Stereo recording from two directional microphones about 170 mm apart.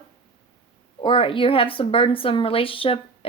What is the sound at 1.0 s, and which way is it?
A woman's voice, 30° left (ahead or behind).